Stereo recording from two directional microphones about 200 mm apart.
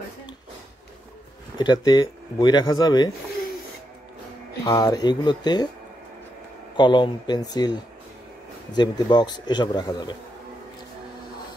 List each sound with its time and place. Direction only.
1.6 s speech: 20° left (ahead or behind)
4.6 s speech: 20° left (ahead or behind)
6.8 s speech: 20° left (ahead or behind)